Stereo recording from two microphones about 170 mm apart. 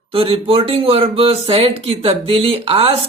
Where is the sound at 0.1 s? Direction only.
35° right (ahead or behind).